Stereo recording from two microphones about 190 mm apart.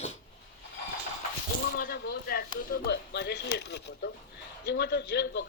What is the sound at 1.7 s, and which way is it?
A man's voice, 50° left (ahead or behind).